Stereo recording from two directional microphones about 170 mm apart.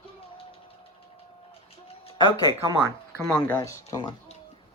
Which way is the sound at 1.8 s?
30° left (ahead or behind).